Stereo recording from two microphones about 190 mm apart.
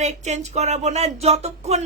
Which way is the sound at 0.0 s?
35° right (ahead or behind).